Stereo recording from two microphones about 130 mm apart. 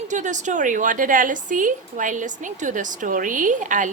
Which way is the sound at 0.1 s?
70° right (ahead or behind).